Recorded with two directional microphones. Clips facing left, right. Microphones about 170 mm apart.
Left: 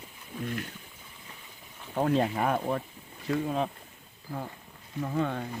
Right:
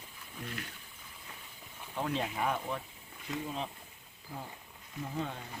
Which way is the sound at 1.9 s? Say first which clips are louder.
Left 9 dB; 45° left (ahead or behind).